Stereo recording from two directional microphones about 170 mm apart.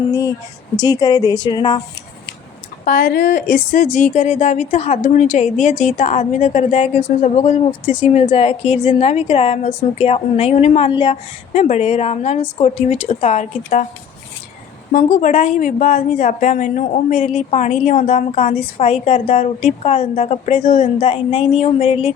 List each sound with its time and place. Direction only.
0.1 s speech: 20° left (ahead or behind)
2.8 s speech: 60° left (ahead or behind)
14.9 s speech: 50° left (ahead or behind)